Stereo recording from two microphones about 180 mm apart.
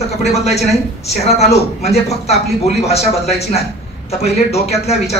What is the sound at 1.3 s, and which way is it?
A man's voice, 35° left (ahead or behind).